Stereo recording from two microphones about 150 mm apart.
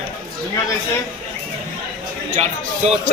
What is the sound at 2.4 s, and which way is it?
Speech, 45° right (ahead or behind).